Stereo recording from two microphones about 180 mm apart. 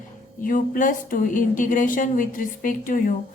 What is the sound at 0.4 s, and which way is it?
A woman's voice, 50° left (ahead or behind).